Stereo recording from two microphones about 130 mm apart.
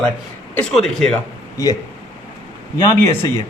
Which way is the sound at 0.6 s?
5° left (ahead or behind).